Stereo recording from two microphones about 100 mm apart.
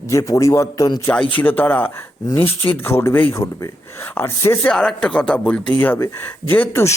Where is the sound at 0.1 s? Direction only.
35° left (ahead or behind).